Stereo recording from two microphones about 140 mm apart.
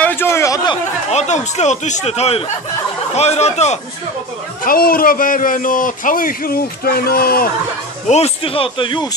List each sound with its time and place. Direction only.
0.0 s chatter: 15° left (ahead or behind)
1.1 s a man's voice: 55° left (ahead or behind)
4.6 s a man's voice: 90° left
8.1 s a man's voice: 45° left (ahead or behind)